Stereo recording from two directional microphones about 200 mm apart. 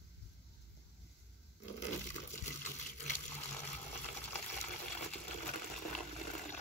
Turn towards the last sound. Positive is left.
turn(degrees=5)  # may be behind; listen again after turning